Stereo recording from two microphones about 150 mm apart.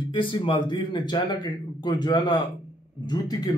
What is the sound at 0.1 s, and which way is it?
A man's voice, 35° left (ahead or behind).